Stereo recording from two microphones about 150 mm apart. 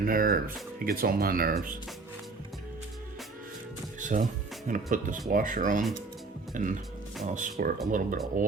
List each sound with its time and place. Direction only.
0.0 s speech: 70° right (ahead or behind)
4.0 s speech: 55° right (ahead or behind)